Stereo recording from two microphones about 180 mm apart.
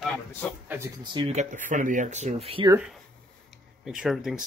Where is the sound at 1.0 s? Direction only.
25° right (ahead or behind).